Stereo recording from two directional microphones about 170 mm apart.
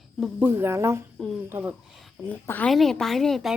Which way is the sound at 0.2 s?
10° right (ahead or behind).